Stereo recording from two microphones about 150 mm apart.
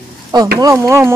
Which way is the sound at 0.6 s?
20° right (ahead or behind).